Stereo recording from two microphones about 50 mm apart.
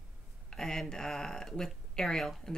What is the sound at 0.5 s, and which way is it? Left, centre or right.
Speech, centre.